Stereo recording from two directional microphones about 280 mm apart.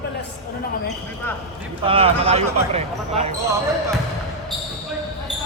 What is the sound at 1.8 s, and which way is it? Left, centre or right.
Speech, centre.